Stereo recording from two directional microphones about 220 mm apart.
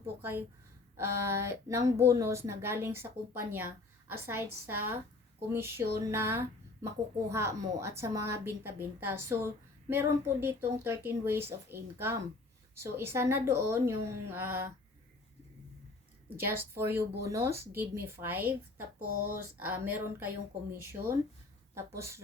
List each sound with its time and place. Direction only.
0.0 s speech: 10° right (ahead or behind)
16.5 s speech: 10° right (ahead or behind)
18.9 s speech: 85° right
19.5 s speech: 10° right (ahead or behind)